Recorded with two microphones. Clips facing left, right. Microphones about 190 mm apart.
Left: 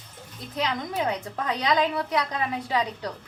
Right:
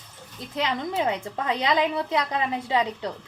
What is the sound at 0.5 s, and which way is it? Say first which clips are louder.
A woman's voice: right 2 dB; 25° right (ahead or behind).